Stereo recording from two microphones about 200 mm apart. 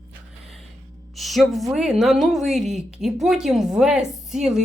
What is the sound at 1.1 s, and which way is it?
Speech, centre (ahead or behind).